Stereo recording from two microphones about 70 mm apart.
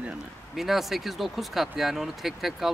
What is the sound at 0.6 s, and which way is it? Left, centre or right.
Speech, centre.